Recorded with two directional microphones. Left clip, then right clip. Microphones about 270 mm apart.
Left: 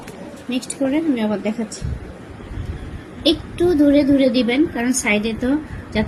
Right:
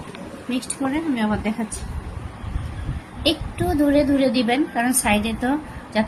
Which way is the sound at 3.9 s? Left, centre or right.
Centre.